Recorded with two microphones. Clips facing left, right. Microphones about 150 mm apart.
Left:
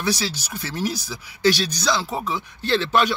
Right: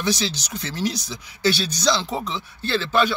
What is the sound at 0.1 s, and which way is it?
Speech, 10° left (ahead or behind).